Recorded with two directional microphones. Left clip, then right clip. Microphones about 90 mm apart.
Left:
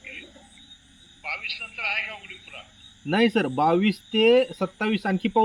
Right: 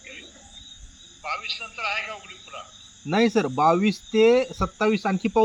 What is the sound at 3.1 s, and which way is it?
Speech, 20° right (ahead or behind).